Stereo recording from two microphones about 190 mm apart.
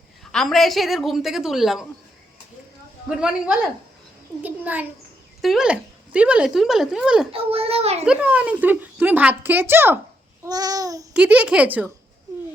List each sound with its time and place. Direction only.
0.3 s speech: centre (ahead or behind)
3.2 s a child's voice: 5° right (ahead or behind)
7.3 s a child's voice: 30° right (ahead or behind)
8.0 s a child's voice: 5° right (ahead or behind)
10.4 s babbling: 20° right (ahead or behind)
11.1 s a child's voice: 5° right (ahead or behind)